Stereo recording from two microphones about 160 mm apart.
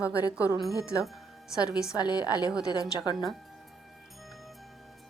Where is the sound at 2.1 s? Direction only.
25° left (ahead or behind).